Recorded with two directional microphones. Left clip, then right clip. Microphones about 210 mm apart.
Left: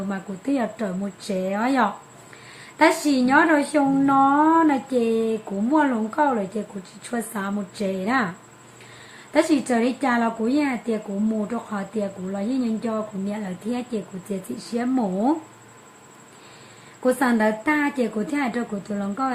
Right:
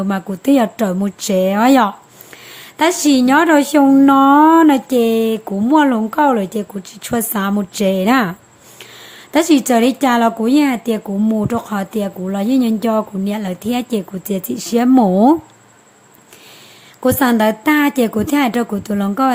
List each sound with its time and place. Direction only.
0.1 s speech: 50° right (ahead or behind)
9.3 s speech: 50° right (ahead or behind)
17.0 s speech: 50° right (ahead or behind)